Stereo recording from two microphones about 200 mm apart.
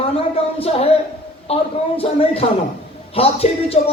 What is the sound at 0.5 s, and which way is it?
A man's voice, 30° left (ahead or behind).